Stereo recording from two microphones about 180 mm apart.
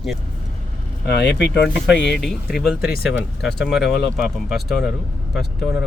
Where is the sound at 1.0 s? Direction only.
70° left (ahead or behind).